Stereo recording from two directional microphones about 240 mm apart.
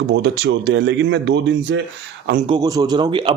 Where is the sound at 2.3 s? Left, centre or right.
Right.